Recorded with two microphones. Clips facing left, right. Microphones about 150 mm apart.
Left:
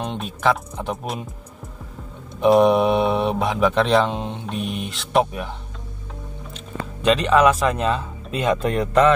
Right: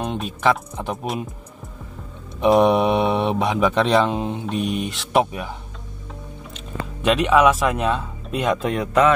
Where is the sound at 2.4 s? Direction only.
Centre (ahead or behind).